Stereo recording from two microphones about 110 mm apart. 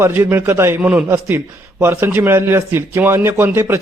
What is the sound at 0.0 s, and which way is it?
Speech, 20° right (ahead or behind).